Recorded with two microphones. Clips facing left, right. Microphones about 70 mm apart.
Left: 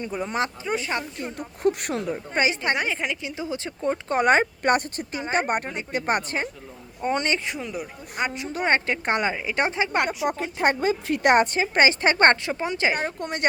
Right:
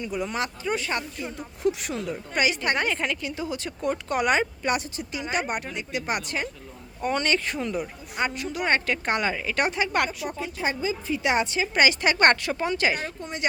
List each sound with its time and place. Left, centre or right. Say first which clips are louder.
0.0 s speech: left 2 dB; left
1.2 s speech: left 4 dB; left
2.1 s speech: right 1 dB; left
2.7 s a woman's voice: even; centre
7.6 s speech: right 3 dB; centre
8.2 s speech: left 1 dB; left
10.6 s a woman's voice: left 6 dB; left
11.6 s a woman's voice: left 2 dB; left
13.1 s a woman's voice: left 4 dB; left